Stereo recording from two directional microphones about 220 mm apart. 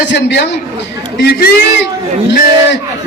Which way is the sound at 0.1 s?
50° left (ahead or behind).